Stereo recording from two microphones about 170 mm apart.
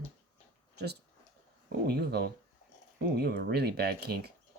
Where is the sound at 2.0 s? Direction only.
70° right (ahead or behind).